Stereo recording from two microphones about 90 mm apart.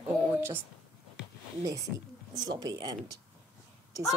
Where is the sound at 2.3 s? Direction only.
50° right (ahead or behind).